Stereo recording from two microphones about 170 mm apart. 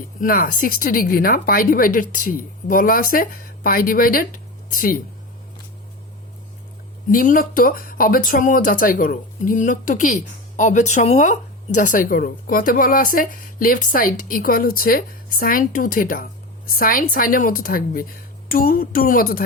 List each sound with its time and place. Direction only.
0.2 s speech: 55° left (ahead or behind)
7.1 s speech: 55° left (ahead or behind)